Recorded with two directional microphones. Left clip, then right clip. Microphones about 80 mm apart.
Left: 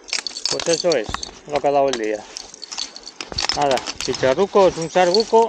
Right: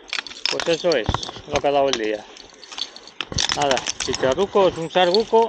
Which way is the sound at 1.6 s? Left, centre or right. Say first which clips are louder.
Left 2 dB; centre.